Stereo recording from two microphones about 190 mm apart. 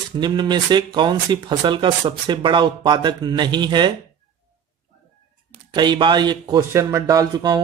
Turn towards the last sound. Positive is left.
turn(degrees=-20)  # may be behind; listen again after turning